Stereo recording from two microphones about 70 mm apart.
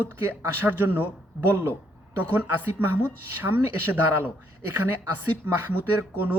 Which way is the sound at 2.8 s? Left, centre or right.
Right.